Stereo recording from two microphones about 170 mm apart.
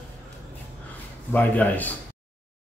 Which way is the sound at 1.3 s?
10° left (ahead or behind).